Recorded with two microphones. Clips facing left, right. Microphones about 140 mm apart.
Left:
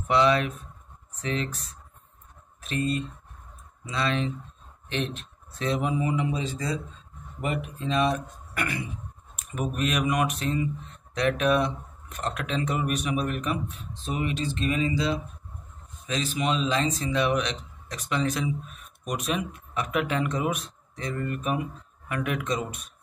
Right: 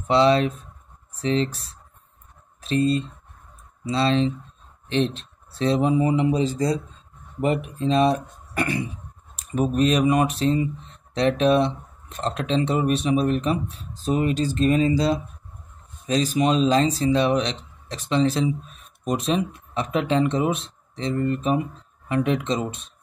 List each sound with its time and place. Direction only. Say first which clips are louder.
0.1 s speech: right 4 dB; 30° right (ahead or behind)